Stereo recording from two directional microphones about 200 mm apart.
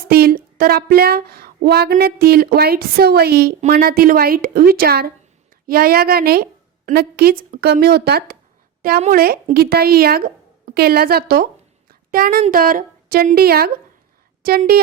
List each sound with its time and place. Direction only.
0.0 s a woman's voice: 50° right (ahead or behind)
11.9 s a sound: 45° right (ahead or behind)
12.4 s a woman's voice: 45° right (ahead or behind)